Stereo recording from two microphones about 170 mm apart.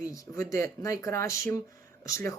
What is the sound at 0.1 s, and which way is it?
Speech, 15° left (ahead or behind).